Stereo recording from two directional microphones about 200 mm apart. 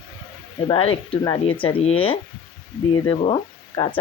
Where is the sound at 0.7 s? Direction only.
25° left (ahead or behind).